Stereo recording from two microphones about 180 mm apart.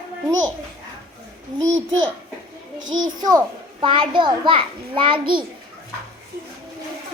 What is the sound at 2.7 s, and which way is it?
Speech, 90° right.